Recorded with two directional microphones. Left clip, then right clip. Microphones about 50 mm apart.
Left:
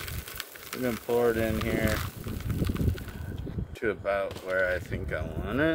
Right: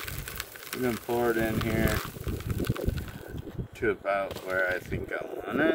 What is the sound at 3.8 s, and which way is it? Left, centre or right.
Speech, left.